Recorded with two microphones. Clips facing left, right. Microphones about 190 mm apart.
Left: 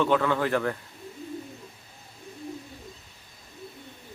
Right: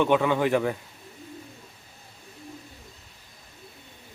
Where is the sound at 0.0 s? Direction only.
15° right (ahead or behind).